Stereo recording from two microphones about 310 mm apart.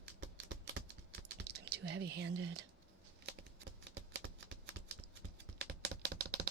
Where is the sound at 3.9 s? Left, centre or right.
Right.